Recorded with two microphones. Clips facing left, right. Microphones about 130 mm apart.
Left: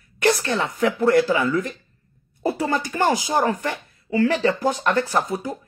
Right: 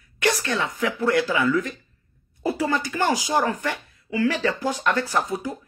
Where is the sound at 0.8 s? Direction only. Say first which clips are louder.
Left 6 dB; 30° left (ahead or behind).